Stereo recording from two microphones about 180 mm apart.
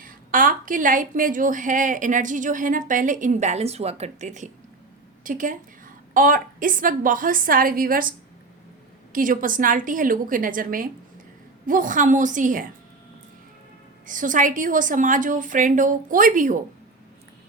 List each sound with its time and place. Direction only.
0.0 s a woman's voice: 50° right (ahead or behind)
9.1 s a woman's voice: 50° right (ahead or behind)
14.1 s a woman's voice: 45° right (ahead or behind)